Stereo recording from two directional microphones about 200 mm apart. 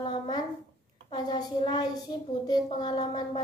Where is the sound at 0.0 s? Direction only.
25° left (ahead or behind).